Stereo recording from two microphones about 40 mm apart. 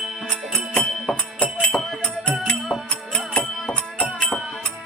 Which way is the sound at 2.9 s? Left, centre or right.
Left.